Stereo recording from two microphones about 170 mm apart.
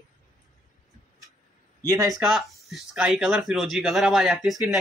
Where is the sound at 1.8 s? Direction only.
20° right (ahead or behind).